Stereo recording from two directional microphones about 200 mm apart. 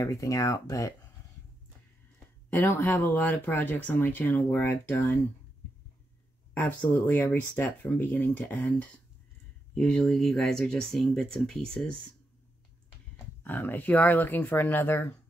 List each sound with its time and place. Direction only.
0.0 s speech: 15° left (ahead or behind)
2.5 s speech: 10° left (ahead or behind)
6.5 s speech: 10° left (ahead or behind)
13.4 s speech: 10° left (ahead or behind)